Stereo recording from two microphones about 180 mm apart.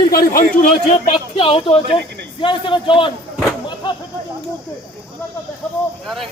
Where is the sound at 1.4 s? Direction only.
30° left (ahead or behind).